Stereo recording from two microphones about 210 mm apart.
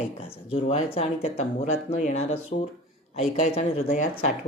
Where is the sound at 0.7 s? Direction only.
30° left (ahead or behind).